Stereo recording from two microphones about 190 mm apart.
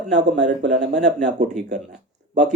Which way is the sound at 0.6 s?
65° right (ahead or behind).